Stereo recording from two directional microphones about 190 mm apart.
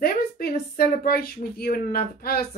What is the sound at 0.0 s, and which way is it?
A woman's voice, 50° left (ahead or behind).